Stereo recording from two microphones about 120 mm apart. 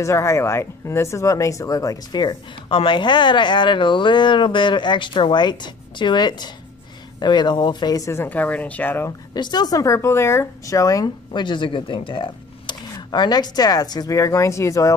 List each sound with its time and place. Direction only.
0.0 s speech: 25° left (ahead or behind)
9.3 s speech: 35° left (ahead or behind)